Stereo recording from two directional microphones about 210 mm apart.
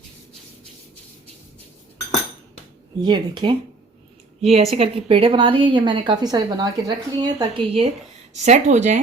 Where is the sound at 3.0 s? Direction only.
20° right (ahead or behind).